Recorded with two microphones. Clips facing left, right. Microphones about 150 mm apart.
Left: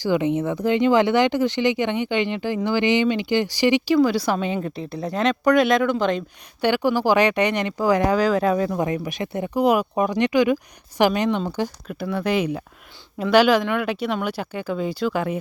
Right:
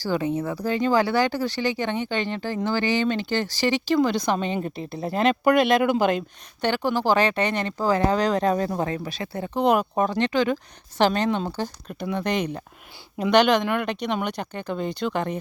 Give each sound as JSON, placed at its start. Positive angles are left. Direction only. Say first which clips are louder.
{"t": 0.0, "sound": "speech", "louder": "left 4 dB", "side_deg": 20}
{"t": 6.6, "sound": "speech", "louder": "left 4 dB", "side_deg": 10}
{"t": 8.8, "sound": "speech", "louder": "left 3 dB", "side_deg": 15}
{"t": 9.6, "sound": "speech", "louder": "left 1 dB", "side_deg": 5}